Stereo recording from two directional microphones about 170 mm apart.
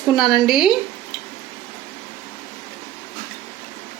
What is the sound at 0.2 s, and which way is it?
Speech, centre (ahead or behind).